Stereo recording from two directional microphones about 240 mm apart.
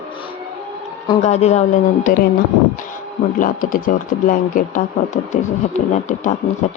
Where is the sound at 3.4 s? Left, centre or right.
Left.